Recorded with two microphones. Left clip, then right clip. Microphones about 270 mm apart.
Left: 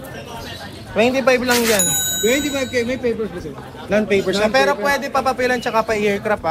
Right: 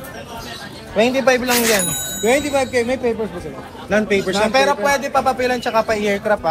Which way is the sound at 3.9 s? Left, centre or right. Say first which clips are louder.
Even; centre.